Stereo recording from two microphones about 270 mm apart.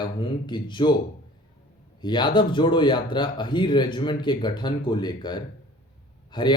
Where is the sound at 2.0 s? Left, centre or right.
Centre.